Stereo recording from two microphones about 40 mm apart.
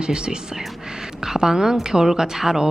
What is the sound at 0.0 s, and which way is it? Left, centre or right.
A woman's voice, right.